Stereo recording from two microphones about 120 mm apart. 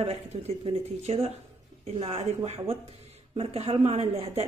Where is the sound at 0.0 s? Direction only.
65° right (ahead or behind).